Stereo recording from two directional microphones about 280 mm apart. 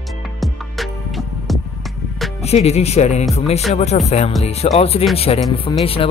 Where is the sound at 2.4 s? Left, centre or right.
Left.